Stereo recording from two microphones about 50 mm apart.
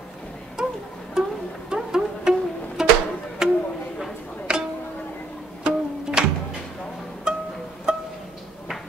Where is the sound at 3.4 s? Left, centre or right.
Centre.